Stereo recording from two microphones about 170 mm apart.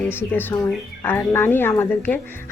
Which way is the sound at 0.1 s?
10° left (ahead or behind).